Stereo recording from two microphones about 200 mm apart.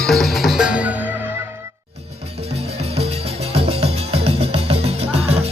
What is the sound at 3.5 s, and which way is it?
Music, 30° right (ahead or behind).